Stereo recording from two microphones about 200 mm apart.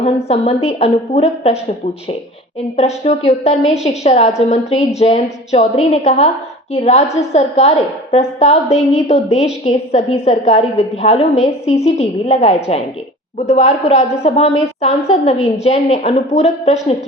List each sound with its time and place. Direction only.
0.3 s a woman's voice: 30° left (ahead or behind)
2.7 s a woman's voice: 35° left (ahead or behind)